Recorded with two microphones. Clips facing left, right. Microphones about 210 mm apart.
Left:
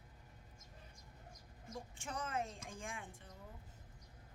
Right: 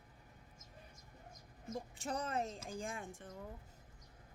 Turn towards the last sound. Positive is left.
turn(degrees=-45)  # may be behind; listen again after turning